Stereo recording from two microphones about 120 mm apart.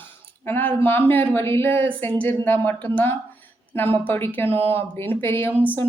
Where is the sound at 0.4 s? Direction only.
15° left (ahead or behind).